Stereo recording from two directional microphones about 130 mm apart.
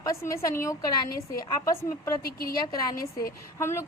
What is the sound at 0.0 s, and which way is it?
A woman's voice, 25° left (ahead or behind).